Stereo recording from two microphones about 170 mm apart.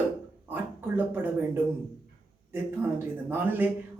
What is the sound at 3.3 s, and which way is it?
Speech, 10° right (ahead or behind).